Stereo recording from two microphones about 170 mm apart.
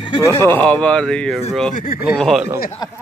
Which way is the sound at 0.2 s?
15° left (ahead or behind).